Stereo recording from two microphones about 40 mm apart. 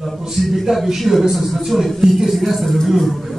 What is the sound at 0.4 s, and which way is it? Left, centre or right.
A man's voice, centre.